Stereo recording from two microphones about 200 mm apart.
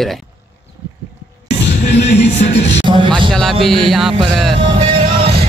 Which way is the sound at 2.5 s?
65° left (ahead or behind).